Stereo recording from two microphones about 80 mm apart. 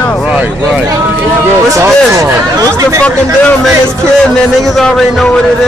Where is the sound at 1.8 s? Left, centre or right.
Right.